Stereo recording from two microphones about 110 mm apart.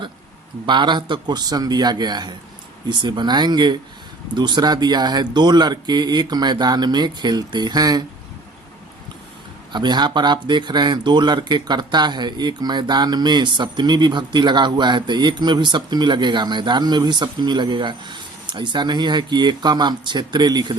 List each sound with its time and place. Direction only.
0.6 s speech: 45° right (ahead or behind)
9.7 s speech: 40° right (ahead or behind)